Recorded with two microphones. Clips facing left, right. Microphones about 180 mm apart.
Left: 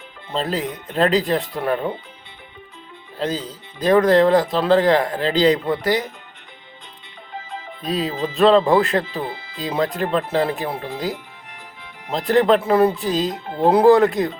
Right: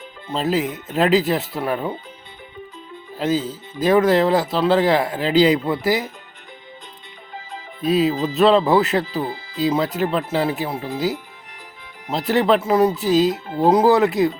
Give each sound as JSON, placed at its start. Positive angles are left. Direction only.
{"t": 0.3, "sound": "speech", "side_deg": -5}
{"t": 3.2, "sound": "speech", "side_deg": -5}
{"t": 7.9, "sound": "speech", "side_deg": -5}
{"t": 8.1, "sound": "speech", "side_deg": -40}
{"t": 8.4, "sound": "speech", "side_deg": 0}
{"t": 9.2, "sound": "music", "side_deg": -40}
{"t": 9.6, "sound": "speech", "side_deg": -5}
{"t": 12.1, "sound": "speech", "side_deg": -5}